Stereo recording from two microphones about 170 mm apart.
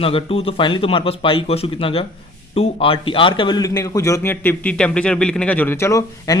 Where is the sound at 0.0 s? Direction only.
35° left (ahead or behind).